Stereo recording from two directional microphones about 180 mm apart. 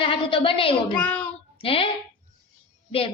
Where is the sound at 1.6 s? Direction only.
30° left (ahead or behind).